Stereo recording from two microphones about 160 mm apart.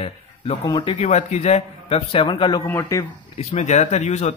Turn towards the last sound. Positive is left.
turn(degrees=45)  # may be behind; listen again after turning